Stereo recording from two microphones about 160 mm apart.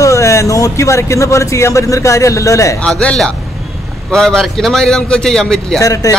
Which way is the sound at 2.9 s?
5° left (ahead or behind).